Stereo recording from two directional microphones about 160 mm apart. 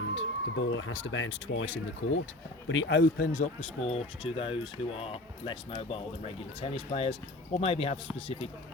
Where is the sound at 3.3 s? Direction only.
45° left (ahead or behind).